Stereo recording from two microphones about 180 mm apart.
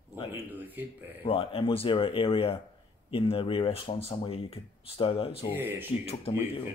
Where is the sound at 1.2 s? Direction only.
30° left (ahead or behind).